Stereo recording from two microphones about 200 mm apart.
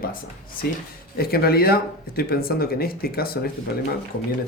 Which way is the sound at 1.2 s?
50° left (ahead or behind).